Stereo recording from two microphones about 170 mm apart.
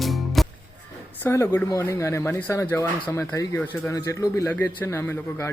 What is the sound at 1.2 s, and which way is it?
Speech, 15° left (ahead or behind).